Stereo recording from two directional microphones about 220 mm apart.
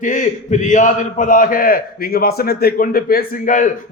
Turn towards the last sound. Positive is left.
turn(degrees=35)  # may be behind; listen again after turning